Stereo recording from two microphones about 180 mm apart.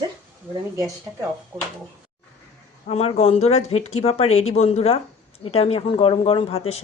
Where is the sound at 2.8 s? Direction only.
35° left (ahead or behind).